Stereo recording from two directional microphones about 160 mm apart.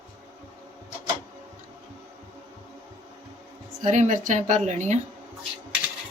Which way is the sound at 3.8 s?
50° right (ahead or behind).